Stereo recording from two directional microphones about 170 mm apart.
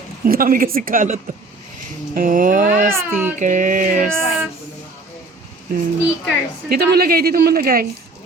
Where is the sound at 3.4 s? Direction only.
50° right (ahead or behind).